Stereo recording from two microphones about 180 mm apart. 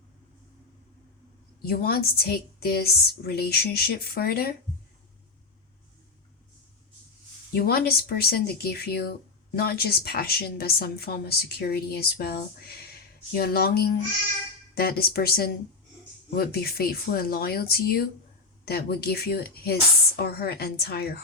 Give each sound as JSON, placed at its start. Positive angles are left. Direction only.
{"t": 1.6, "sound": "a woman's voice", "side_deg": 60}
{"t": 7.5, "sound": "a woman's voice", "side_deg": 55}